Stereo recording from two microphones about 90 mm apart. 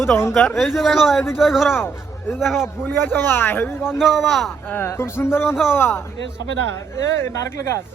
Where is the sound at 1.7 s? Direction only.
25° left (ahead or behind).